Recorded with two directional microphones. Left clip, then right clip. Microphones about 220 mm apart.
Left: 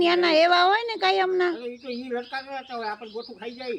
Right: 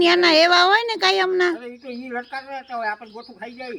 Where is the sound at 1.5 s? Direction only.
5° right (ahead or behind).